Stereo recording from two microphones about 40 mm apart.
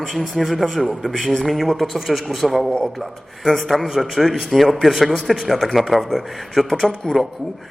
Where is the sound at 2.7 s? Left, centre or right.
Centre.